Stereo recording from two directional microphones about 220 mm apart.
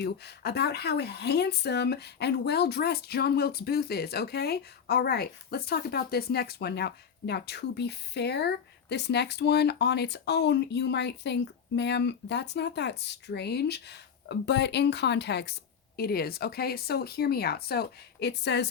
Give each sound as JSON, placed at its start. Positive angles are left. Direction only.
{"t": 0.0, "sound": "speech", "side_deg": 50}